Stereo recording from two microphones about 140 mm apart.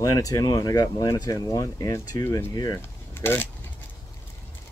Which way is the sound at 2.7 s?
15° left (ahead or behind).